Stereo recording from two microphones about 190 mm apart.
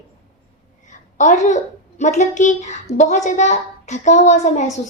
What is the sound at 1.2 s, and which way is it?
A woman's voice, 40° left (ahead or behind).